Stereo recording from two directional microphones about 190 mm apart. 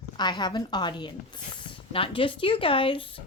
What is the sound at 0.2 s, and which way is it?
Speech, 20° left (ahead or behind).